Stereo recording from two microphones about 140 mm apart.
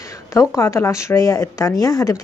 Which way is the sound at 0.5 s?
20° left (ahead or behind).